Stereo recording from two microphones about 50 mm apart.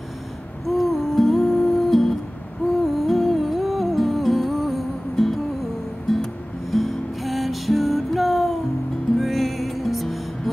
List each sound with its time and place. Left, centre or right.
0.7 s humming: centre
2.8 s music: centre